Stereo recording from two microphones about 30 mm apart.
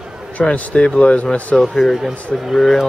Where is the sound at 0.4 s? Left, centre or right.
Left.